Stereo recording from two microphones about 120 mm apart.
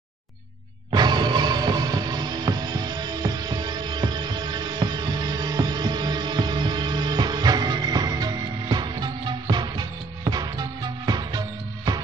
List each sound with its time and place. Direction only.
0.9 s music: 35° right (ahead or behind)